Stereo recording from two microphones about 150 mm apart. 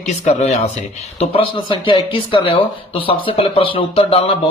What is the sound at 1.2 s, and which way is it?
Speech, 35° left (ahead or behind).